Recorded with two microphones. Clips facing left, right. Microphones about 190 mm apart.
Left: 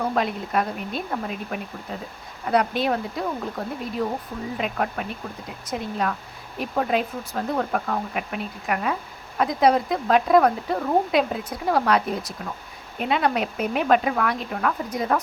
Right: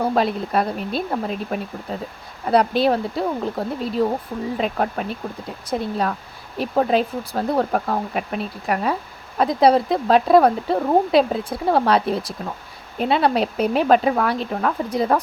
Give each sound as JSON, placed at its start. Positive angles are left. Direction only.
{"t": 0.0, "sound": "speech", "side_deg": -35}